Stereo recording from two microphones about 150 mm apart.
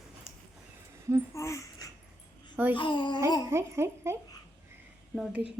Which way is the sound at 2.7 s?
30° left (ahead or behind).